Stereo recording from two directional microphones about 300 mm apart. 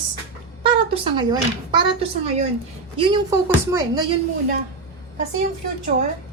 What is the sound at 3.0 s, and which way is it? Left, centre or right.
A woman's voice, centre.